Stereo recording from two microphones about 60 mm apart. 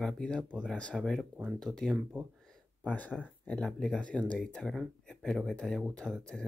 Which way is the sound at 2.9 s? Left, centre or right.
Left.